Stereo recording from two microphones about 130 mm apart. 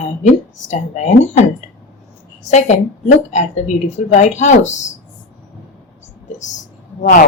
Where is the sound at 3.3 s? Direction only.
65° left (ahead or behind).